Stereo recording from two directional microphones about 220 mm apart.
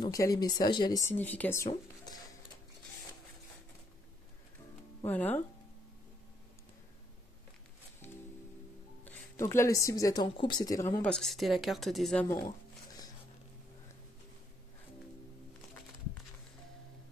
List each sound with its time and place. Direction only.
0.0 s a woman's voice: 15° left (ahead or behind)
5.0 s a woman's voice: 10° left (ahead or behind)
9.0 s a woman's voice: 10° left (ahead or behind)
12.3 s a sound: 15° left (ahead or behind)